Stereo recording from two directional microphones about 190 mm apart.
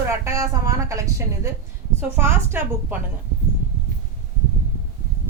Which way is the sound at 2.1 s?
10° right (ahead or behind).